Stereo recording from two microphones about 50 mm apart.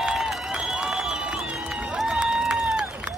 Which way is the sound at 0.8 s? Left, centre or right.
Centre.